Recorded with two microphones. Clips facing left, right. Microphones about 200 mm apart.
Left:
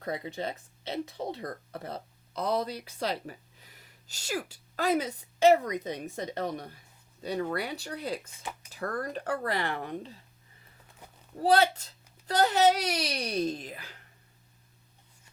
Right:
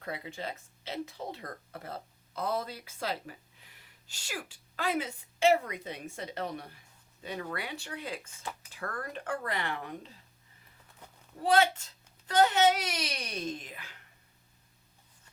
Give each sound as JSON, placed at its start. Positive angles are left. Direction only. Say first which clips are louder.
{"t": 0.0, "sound": "a child's voice", "louder": "left 5 dB", "side_deg": 35}
{"t": 11.4, "sound": "a child's voice", "louder": "left 2 dB", "side_deg": 35}